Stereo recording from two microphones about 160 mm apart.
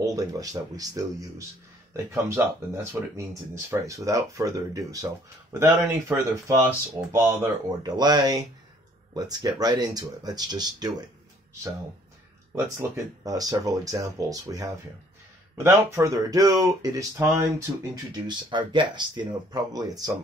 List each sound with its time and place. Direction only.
0.0 s speech: 20° right (ahead or behind)
2.0 s speech: 15° right (ahead or behind)
7.8 s speech: 25° right (ahead or behind)
12.5 s speech: 15° right (ahead or behind)